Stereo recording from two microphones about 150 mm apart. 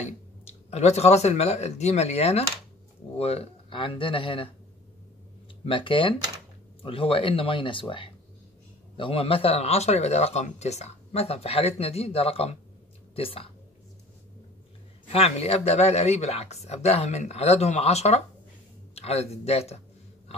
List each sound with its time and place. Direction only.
0.0 s speech: 45° left (ahead or behind)
5.7 s speech: 35° left (ahead or behind)
15.0 s speech: 45° left (ahead or behind)